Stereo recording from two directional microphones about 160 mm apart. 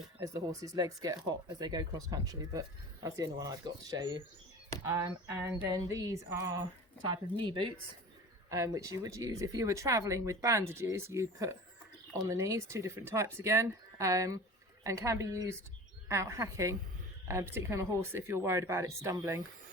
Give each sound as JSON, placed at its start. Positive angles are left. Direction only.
{"t": 0.2, "sound": "speech", "side_deg": -20}